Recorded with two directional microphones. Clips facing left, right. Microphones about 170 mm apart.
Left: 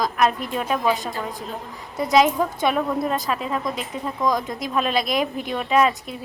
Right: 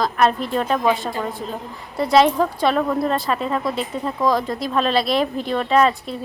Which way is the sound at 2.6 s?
15° left (ahead or behind).